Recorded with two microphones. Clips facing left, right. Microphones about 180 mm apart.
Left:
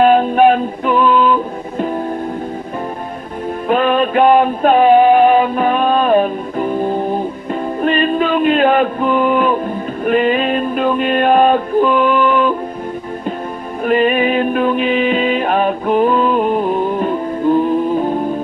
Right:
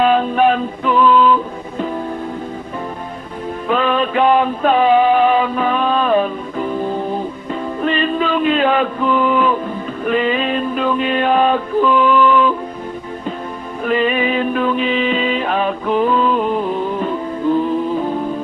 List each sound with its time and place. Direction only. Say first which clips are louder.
0.0 s music: left 4 dB; 50° left (ahead or behind)
3.7 s music: left 3 dB; 50° left (ahead or behind)
7.8 s a sound: left 3 dB; 50° left (ahead or behind)
10.0 s music: left 3 dB; 50° left (ahead or behind)
13.8 s music: left 3 dB; 50° left (ahead or behind)